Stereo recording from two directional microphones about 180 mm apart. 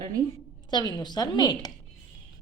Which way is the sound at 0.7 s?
25° left (ahead or behind).